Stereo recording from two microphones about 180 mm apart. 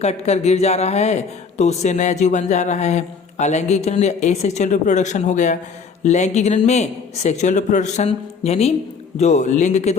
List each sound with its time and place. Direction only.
0.0 s speech: 35° left (ahead or behind)